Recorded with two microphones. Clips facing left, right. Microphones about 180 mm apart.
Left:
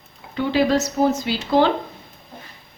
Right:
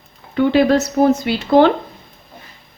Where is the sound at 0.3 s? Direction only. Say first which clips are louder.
Right 5 dB; 60° right (ahead or behind).